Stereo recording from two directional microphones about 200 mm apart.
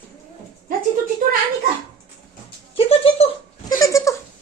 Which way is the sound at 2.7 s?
30° left (ahead or behind).